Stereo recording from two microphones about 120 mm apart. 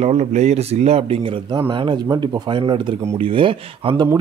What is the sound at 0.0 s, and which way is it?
Speech, 70° right (ahead or behind).